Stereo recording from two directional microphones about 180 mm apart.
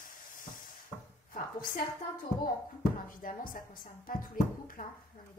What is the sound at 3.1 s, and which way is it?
Speech, 50° left (ahead or behind).